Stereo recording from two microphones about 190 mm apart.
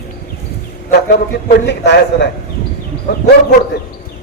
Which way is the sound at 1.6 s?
65° left (ahead or behind).